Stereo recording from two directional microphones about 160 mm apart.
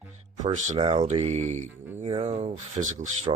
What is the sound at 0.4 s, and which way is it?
Speech, 35° right (ahead or behind).